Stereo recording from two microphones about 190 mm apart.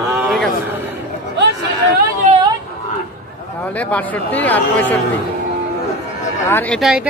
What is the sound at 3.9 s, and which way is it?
Speech, 10° left (ahead or behind).